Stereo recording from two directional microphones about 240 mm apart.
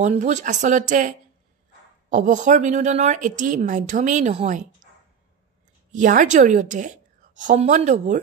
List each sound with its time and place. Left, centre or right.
0.0 s a woman's voice: right
5.9 s a woman's voice: right